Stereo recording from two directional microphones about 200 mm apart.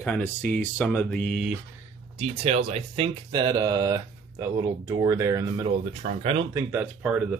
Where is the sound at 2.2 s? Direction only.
30° right (ahead or behind).